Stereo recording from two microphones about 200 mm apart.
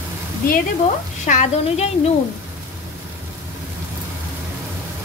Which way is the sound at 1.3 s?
40° left (ahead or behind).